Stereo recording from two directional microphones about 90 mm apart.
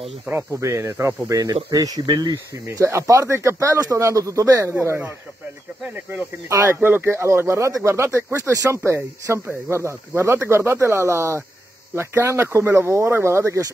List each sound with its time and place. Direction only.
0.3 s speech: 25° right (ahead or behind); by 2.3 s 50° right (ahead or behind)
2.3 s speech: 30° right (ahead or behind)
4.7 s speech: 25° right (ahead or behind)
6.5 s speech: 35° right (ahead or behind)